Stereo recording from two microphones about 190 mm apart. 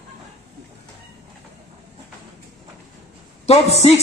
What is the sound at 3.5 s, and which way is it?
Speech, 35° left (ahead or behind).